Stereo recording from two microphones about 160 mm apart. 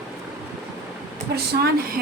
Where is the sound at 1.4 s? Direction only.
80° right.